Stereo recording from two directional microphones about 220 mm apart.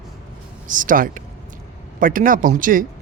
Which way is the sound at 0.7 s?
35° right (ahead or behind).